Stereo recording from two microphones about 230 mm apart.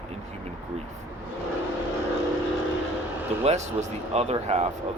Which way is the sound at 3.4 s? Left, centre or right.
Right.